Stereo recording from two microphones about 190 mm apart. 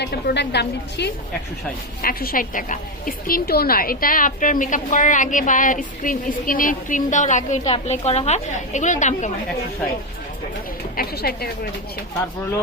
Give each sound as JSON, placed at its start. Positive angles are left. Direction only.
{"t": 0.0, "sound": "a woman's voice", "side_deg": 60}
{"t": 2.0, "sound": "a woman's voice", "side_deg": 50}
{"t": 10.9, "sound": "a woman's voice", "side_deg": 55}